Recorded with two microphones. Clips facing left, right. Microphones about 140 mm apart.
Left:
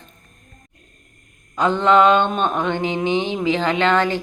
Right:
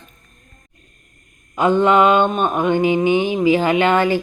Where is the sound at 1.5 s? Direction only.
10° right (ahead or behind).